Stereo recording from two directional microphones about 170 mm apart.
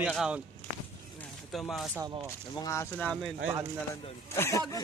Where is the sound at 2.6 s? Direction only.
15° left (ahead or behind).